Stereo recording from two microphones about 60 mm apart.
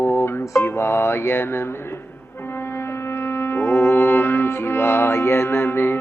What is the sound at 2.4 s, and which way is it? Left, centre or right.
Music, left.